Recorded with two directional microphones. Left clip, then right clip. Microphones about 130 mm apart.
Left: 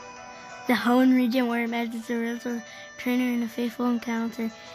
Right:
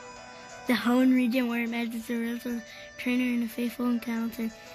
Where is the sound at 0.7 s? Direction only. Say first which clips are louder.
Left 3 dB; 30° left (ahead or behind).